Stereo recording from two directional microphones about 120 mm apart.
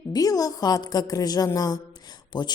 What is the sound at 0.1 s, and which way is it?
A woman's voice, 30° left (ahead or behind).